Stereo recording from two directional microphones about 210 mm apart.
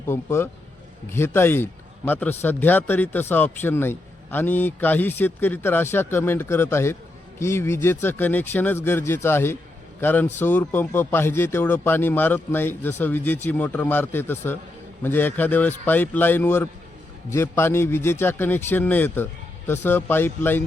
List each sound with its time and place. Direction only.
0.1 s a man's voice: 10° left (ahead or behind)